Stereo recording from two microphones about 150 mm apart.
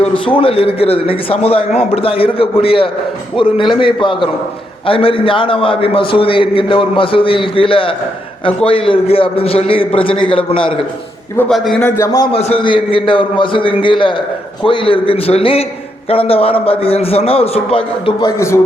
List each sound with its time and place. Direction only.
0.0 s a man's voice: 35° left (ahead or behind)
11.3 s a man's voice: centre (ahead or behind)
11.8 s a man's voice: 15° left (ahead or behind)
12.3 s a man's voice: 40° left (ahead or behind)
18.2 s a man's voice: 20° left (ahead or behind)